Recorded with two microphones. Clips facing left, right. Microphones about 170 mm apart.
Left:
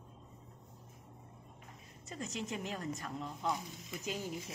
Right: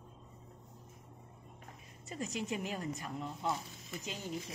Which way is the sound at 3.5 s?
10° left (ahead or behind).